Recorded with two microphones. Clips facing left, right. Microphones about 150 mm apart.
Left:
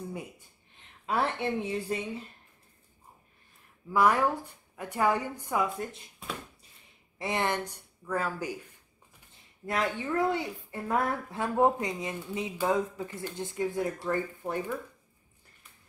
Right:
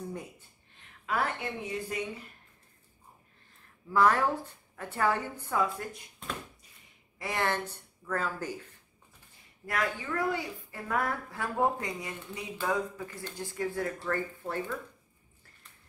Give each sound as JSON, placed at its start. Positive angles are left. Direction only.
{"t": 1.0, "sound": "a woman's voice", "side_deg": 30}
{"t": 3.9, "sound": "a woman's voice", "side_deg": 10}
{"t": 7.2, "sound": "a woman's voice", "side_deg": 20}
{"t": 9.3, "sound": "a woman's voice", "side_deg": 25}